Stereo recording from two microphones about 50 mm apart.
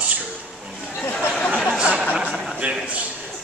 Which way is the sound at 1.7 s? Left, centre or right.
Right.